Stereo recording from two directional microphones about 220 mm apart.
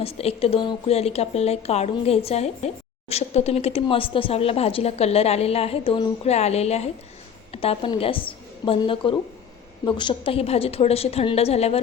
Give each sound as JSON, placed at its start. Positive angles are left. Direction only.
{"t": 0.0, "sound": "a woman's voice", "side_deg": 25}